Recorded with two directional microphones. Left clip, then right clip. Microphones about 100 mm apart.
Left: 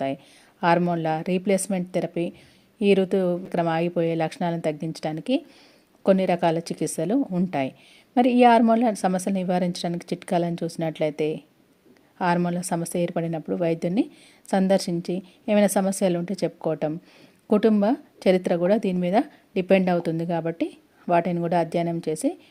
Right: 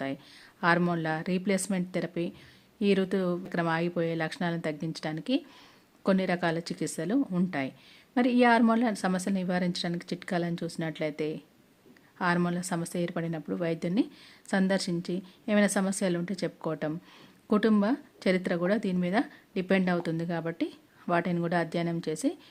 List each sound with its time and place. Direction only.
0.9 s a woman's voice: 30° left (ahead or behind)